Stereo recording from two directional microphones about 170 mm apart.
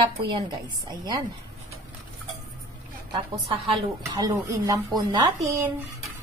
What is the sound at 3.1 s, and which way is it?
Speech, 30° right (ahead or behind).